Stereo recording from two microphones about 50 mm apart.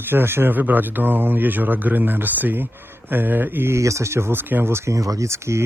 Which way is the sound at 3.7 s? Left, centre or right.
Right.